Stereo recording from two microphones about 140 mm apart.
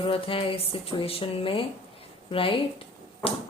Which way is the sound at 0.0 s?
40° left (ahead or behind).